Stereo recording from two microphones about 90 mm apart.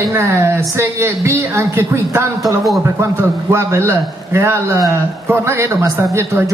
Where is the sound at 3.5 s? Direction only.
30° right (ahead or behind).